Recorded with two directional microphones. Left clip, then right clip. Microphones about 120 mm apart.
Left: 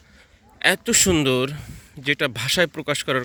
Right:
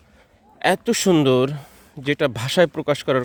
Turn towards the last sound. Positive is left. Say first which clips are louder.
# right 3 dB
turn(degrees=-30)  # may be behind; listen again after turning